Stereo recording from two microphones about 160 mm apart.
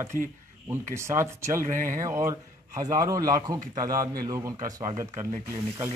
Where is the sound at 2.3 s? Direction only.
20° right (ahead or behind).